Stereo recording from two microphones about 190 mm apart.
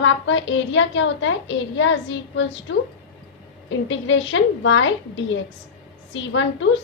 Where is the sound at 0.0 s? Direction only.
75° left (ahead or behind).